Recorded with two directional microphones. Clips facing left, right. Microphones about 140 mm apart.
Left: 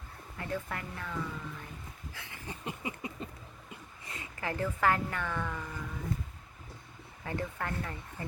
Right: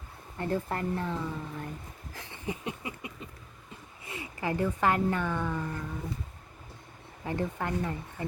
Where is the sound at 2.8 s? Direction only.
25° left (ahead or behind).